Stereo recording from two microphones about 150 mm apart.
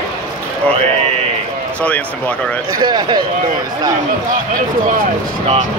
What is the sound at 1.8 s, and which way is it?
Speech, 10° left (ahead or behind).